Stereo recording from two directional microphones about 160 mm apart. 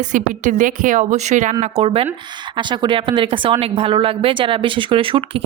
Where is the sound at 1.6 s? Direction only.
35° right (ahead or behind).